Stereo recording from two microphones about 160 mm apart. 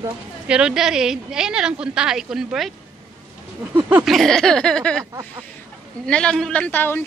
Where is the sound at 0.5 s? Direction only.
5° right (ahead or behind).